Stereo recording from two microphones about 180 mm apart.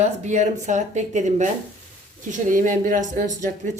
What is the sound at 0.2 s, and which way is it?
Speech, 40° right (ahead or behind).